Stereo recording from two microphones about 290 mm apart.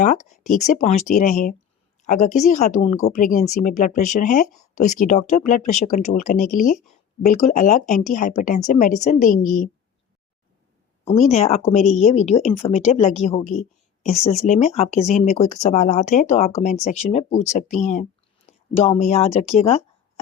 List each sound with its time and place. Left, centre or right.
0.3 s a woman's voice: left
6.8 s a sound: left
7.4 s a woman's voice: left
11.0 s a woman's voice: left